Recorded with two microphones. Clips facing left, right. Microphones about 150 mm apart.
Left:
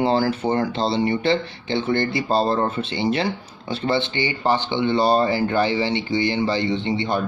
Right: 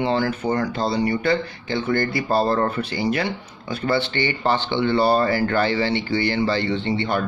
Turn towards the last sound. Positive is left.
turn(degrees=15)  # may be behind; listen again after turning